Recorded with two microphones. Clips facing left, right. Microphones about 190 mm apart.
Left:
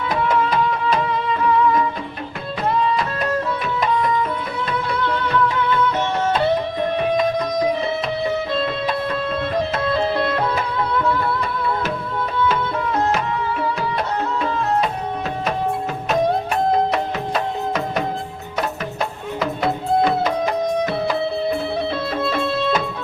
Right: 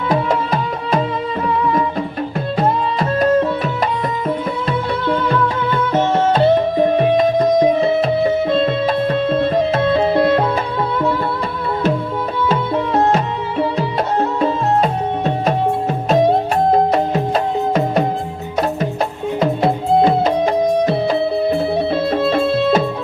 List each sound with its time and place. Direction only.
0.1 s music: 35° right (ahead or behind)
5.0 s music: 40° right (ahead or behind)
8.6 s music: 30° right (ahead or behind)
12.5 s music: 35° right (ahead or behind)
16.9 s music: 30° right (ahead or behind)
19.4 s music: 25° right (ahead or behind)
22.2 s music: 30° right (ahead or behind)